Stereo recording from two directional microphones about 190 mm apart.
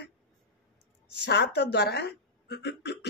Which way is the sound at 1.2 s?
65° left (ahead or behind).